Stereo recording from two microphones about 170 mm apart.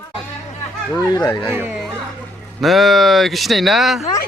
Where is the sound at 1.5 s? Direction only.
15° right (ahead or behind).